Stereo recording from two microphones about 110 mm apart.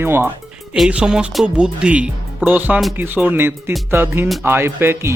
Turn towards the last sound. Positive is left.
turn(degrees=-20)  # may be behind; listen again after turning